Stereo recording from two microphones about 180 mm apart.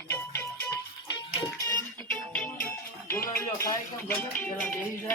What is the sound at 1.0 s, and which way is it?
Music, 25° left (ahead or behind).